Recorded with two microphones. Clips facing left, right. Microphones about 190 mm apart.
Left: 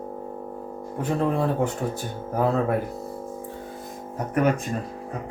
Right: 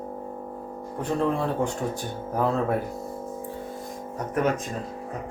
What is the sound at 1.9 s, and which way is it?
Speech, 5° left (ahead or behind).